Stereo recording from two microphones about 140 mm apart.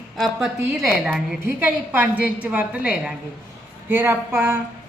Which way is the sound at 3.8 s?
15° right (ahead or behind).